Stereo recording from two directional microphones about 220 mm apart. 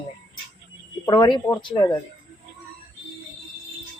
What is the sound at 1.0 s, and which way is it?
Speech, 20° left (ahead or behind).